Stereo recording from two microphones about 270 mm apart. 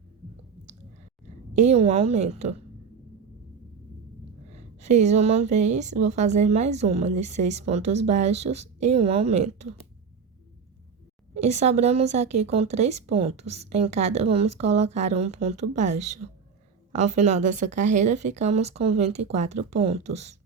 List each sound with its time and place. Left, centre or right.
1.5 s a woman's voice: right
4.5 s a woman's voice: right
11.3 s a woman's voice: right
17.0 s a woman's voice: right